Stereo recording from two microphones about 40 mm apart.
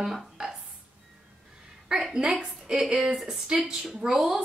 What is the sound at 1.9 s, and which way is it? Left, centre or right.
A woman's voice, centre.